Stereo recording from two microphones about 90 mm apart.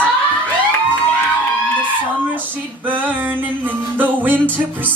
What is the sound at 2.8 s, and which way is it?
Music, 20° right (ahead or behind).